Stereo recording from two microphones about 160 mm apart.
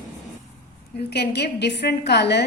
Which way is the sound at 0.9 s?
90° left.